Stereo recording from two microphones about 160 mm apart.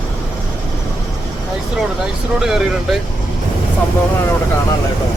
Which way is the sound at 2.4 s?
5° right (ahead or behind).